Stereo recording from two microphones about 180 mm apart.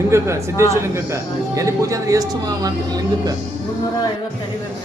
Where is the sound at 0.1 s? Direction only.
15° right (ahead or behind).